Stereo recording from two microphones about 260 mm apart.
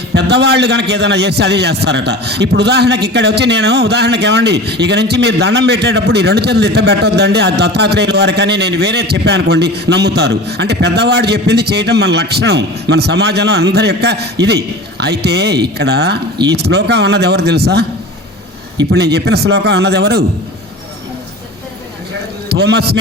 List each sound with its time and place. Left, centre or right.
0.1 s a man's voice: right
18.9 s a man's voice: right
22.4 s a man's voice: right